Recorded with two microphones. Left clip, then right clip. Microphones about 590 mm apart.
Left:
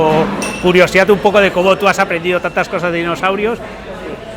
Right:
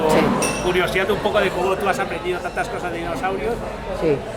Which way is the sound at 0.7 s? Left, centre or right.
Left.